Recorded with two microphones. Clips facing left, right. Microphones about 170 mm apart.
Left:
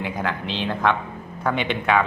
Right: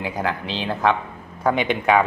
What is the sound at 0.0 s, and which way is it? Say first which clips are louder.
A man's voice: right 1 dB; 10° right (ahead or behind).